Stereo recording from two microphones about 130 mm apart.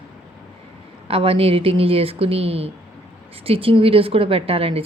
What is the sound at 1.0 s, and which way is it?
A woman's voice, 45° right (ahead or behind).